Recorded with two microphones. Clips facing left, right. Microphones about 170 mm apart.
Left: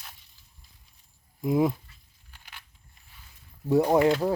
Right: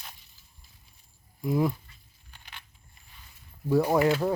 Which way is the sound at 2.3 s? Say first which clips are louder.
Right 1 dB; 5° left (ahead or behind).